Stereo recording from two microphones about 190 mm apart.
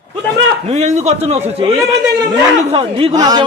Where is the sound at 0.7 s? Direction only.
35° right (ahead or behind).